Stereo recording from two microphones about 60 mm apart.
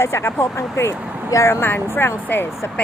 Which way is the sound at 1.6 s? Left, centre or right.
Left.